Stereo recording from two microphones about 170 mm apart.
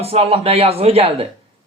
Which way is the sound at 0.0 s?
35° right (ahead or behind).